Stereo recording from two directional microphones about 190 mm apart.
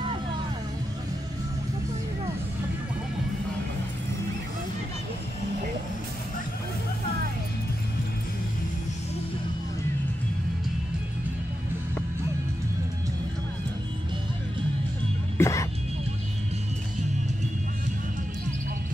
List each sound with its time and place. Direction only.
15.3 s music: 15° left (ahead or behind)